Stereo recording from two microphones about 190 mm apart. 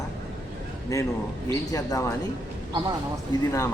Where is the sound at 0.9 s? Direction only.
15° left (ahead or behind).